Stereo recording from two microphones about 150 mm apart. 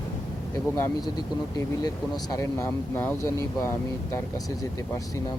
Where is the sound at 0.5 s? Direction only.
25° left (ahead or behind).